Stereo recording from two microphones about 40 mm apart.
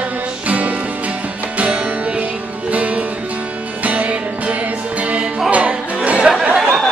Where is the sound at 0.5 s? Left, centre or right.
Right.